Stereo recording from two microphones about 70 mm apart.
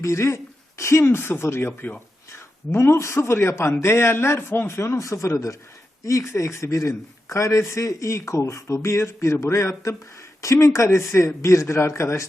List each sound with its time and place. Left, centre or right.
0.0 s a man's voice: left